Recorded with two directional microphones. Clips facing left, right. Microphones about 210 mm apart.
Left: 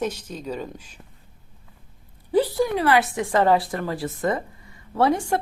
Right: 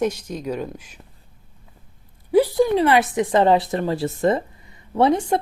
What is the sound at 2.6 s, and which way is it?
A woman's voice, 25° right (ahead or behind).